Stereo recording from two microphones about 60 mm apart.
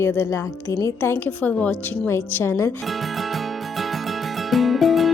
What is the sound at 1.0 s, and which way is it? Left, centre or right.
A woman's voice, left.